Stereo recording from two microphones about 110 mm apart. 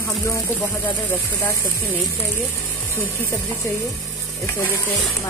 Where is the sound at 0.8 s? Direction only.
15° left (ahead or behind).